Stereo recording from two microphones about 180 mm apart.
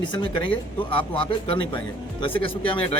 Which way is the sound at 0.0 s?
25° left (ahead or behind).